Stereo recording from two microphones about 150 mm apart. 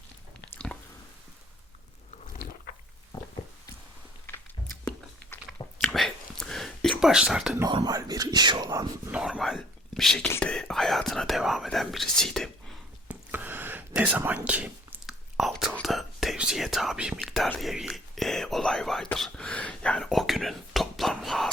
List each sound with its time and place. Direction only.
0.7 s squish: 15° left (ahead or behind)
5.8 s a sound: centre (ahead or behind)
7.7 s speech: 25° right (ahead or behind)
9.1 s speech: 5° right (ahead or behind)
13.1 s a sound: 10° right (ahead or behind)
15.7 s whispering: centre (ahead or behind)
17.6 s speech: centre (ahead or behind)
19.0 s whispering: 5° left (ahead or behind)